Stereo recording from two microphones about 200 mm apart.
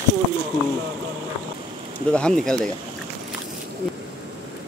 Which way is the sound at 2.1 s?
5° left (ahead or behind).